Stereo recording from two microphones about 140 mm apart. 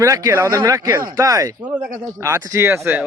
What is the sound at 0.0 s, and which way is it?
Speech, 20° right (ahead or behind).